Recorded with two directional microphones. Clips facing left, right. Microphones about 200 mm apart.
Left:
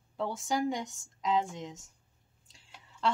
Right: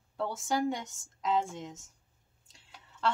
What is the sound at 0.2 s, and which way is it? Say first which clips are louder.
Speech: even; centre (ahead or behind).